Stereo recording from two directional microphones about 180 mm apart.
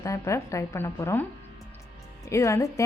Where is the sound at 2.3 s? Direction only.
15° left (ahead or behind).